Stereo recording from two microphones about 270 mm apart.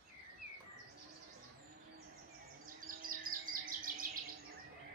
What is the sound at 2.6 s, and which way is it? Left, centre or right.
Bird, right.